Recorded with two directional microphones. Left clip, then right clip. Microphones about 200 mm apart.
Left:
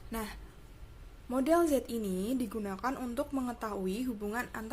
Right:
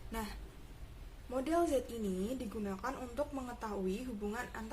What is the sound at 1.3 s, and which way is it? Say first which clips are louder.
A woman's voice: left 5 dB; 45° left (ahead or behind).